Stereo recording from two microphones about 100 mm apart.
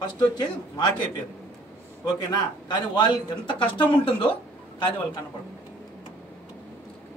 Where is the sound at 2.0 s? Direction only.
45° left (ahead or behind).